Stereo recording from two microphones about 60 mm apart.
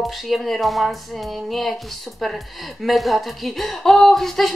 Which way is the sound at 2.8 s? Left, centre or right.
Centre.